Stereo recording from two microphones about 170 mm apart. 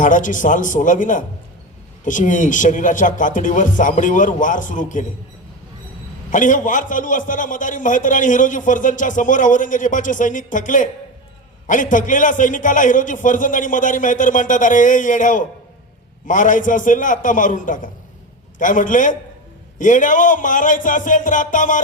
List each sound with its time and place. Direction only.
0.0 s a man's voice: 50° left (ahead or behind)
6.3 s a man's voice: 50° left (ahead or behind)